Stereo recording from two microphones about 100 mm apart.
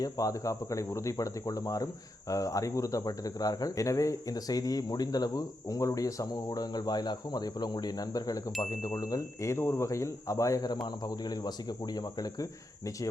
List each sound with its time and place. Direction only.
0.0 s speech: 35° left (ahead or behind)